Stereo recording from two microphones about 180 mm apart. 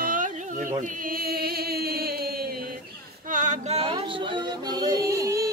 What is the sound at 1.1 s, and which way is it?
Music, 55° right (ahead or behind).